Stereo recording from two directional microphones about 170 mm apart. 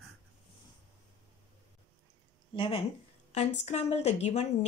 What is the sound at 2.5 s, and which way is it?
Speech, 30° left (ahead or behind).